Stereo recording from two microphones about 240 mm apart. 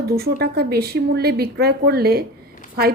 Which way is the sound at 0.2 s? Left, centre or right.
Right.